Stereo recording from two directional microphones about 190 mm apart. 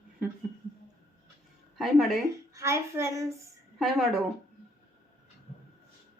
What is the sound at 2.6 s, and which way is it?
Speech, 15° right (ahead or behind).